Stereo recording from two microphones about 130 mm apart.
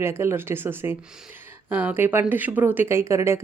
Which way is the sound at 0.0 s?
20° right (ahead or behind).